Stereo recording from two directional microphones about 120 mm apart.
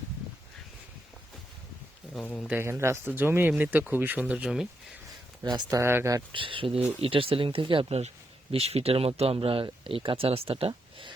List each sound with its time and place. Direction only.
2.5 s speech: 20° right (ahead or behind)
5.5 s speech: 35° right (ahead or behind)
5.8 s speech: 20° right (ahead or behind)
6.3 s speech: 45° right (ahead or behind)